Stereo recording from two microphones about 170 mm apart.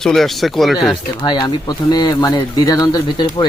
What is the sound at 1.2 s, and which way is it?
Speech, 25° left (ahead or behind).